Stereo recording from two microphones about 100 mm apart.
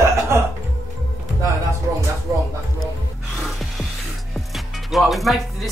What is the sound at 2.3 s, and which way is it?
Music, 35° right (ahead or behind).